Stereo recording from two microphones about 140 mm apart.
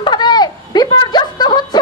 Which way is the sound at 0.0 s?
30° left (ahead or behind).